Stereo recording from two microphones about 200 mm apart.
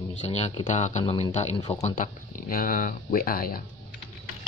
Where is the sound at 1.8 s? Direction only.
40° left (ahead or behind).